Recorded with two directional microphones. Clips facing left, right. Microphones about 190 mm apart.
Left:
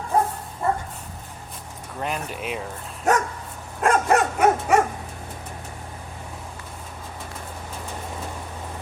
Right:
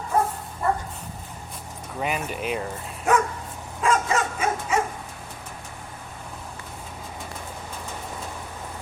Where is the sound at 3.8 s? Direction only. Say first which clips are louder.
Left 4 dB; 60° left (ahead or behind).